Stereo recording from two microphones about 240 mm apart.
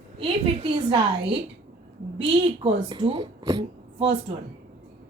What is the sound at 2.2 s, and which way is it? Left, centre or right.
Speech, right.